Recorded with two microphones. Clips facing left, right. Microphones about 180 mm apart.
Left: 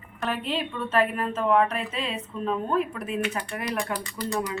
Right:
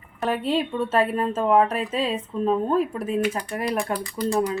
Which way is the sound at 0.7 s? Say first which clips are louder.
Right 3 dB; 25° right (ahead or behind).